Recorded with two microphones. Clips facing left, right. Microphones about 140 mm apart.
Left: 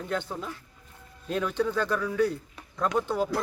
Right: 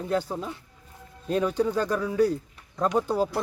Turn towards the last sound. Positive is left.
turn(degrees=-35)  # may be behind; listen again after turning